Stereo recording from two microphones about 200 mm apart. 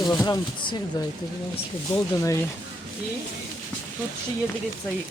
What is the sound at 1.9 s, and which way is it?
Speech, 15° left (ahead or behind).